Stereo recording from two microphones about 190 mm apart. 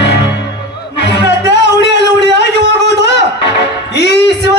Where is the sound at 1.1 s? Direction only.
65° left (ahead or behind).